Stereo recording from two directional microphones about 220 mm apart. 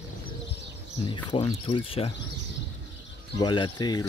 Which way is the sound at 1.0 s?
20° left (ahead or behind).